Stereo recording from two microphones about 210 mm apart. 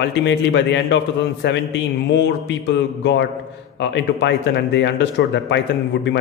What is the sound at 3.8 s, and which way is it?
A man's voice, 55° left (ahead or behind).